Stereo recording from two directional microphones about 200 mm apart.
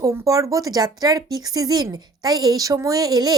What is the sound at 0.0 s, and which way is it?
Speech, 15° right (ahead or behind).